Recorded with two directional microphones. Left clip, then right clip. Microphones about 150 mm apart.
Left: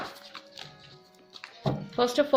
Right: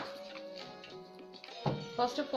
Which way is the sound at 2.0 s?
90° left.